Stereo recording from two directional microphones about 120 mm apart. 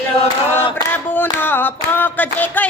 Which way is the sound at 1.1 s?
15° left (ahead or behind).